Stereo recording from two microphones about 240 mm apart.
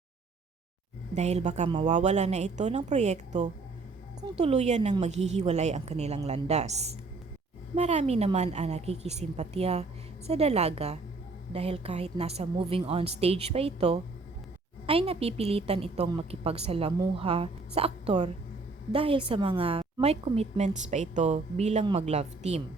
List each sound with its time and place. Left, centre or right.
1.1 s a woman's voice: right